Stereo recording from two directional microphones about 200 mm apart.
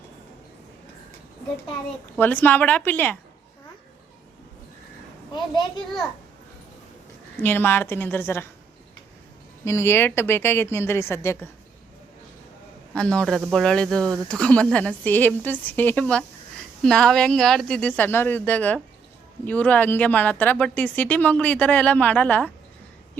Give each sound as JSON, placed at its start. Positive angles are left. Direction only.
{"t": 2.1, "sound": "a woman's voice", "side_deg": 10}
{"t": 5.3, "sound": "a child's voice", "side_deg": 20}
{"t": 7.4, "sound": "a woman's voice", "side_deg": 10}
{"t": 9.6, "sound": "a woman's voice", "side_deg": 15}
{"t": 12.9, "sound": "a woman's voice", "side_deg": 5}